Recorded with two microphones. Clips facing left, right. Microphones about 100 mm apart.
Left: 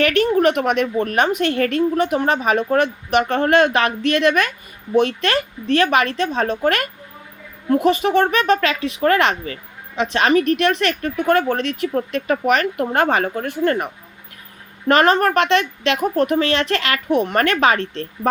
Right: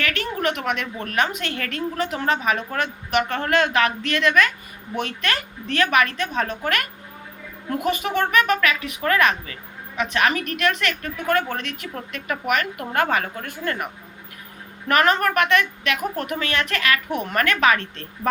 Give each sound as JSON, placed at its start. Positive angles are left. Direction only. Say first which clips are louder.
{"t": 0.1, "sound": "a woman's voice", "louder": "left 9 dB", "side_deg": 25}